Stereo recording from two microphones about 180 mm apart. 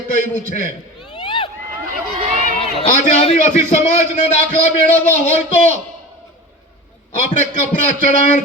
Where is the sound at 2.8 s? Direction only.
40° left (ahead or behind).